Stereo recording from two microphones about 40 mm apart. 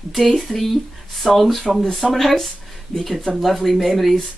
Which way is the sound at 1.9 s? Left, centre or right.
Centre.